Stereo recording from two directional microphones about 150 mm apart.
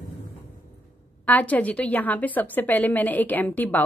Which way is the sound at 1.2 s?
10° left (ahead or behind).